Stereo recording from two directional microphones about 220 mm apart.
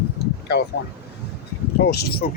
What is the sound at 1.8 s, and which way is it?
Speech, 45° left (ahead or behind).